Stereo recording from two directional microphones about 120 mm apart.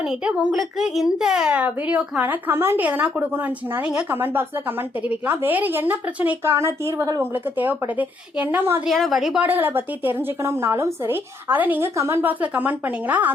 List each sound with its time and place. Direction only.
0.0 s a child's voice: 5° right (ahead or behind)
8.9 s a woman's voice: centre (ahead or behind)
9.5 s a child's voice: 15° right (ahead or behind)